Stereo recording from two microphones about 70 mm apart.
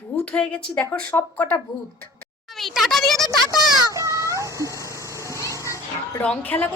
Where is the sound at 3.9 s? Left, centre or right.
Right.